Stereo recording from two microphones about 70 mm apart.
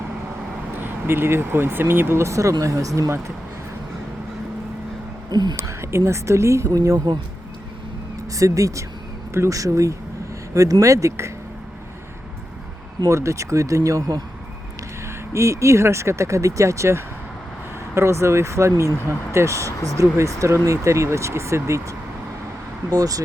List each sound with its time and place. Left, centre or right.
0.8 s speech: right
5.3 s speech: right
5.5 s speech: right
8.4 s speech: right
13.1 s speech: right
15.3 s speech: right
22.9 s speech: right